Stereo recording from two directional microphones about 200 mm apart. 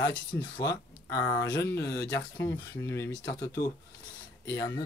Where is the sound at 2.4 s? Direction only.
15° left (ahead or behind).